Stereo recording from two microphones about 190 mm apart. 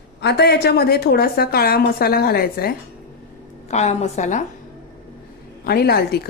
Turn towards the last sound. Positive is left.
turn(degrees=55)  # may be behind; listen again after turning